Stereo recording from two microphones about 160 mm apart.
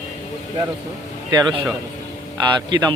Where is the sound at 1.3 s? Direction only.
30° right (ahead or behind).